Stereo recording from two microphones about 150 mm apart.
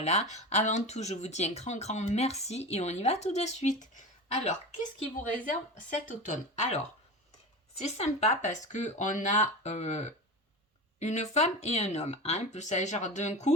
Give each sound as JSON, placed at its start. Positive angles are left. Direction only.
{"t": 0.0, "sound": "speech", "side_deg": 45}
{"t": 5.3, "sound": "speech", "side_deg": 60}
{"t": 7.9, "sound": "speech", "side_deg": 50}